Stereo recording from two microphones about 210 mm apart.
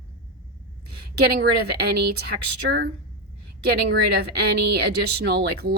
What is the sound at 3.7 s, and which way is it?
A woman's voice, 50° right (ahead or behind).